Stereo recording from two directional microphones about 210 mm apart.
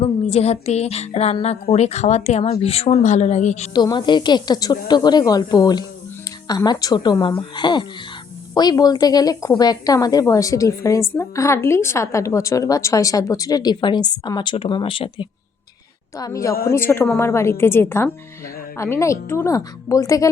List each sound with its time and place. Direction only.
0.0 s speech: 30° left (ahead or behind)
3.7 s a woman's voice: 20° left (ahead or behind)